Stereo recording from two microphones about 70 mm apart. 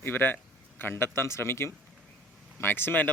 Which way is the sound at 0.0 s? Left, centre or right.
Left.